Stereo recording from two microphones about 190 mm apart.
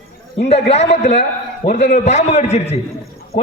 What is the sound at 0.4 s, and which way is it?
A man's voice, 35° left (ahead or behind).